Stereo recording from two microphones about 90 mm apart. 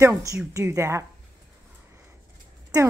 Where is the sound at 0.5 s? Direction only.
35° right (ahead or behind).